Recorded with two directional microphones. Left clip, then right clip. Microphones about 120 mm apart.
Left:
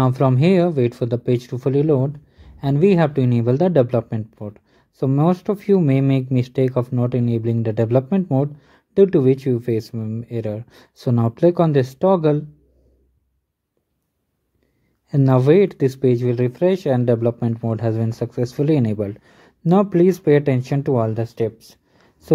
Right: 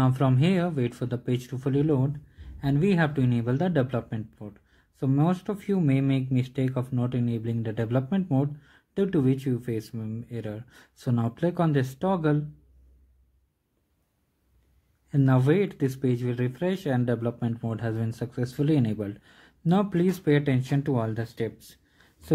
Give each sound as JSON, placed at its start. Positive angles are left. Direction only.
{"t": 0.0, "sound": "speech", "side_deg": 15}
{"t": 15.0, "sound": "speech", "side_deg": 20}